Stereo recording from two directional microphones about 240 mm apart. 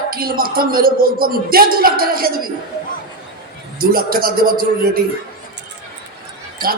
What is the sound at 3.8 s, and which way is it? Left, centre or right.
Speech, right.